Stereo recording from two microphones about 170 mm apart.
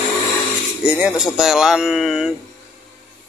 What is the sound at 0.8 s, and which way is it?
Speech, 10° right (ahead or behind).